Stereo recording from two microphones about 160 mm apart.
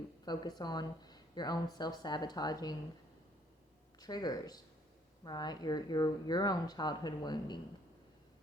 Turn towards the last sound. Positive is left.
turn(degrees=25)  # may be behind; listen again after turning